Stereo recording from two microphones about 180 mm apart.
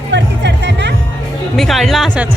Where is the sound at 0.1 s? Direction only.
75° right (ahead or behind).